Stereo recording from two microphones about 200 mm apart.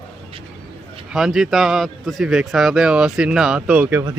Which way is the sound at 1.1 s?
Centre (ahead or behind).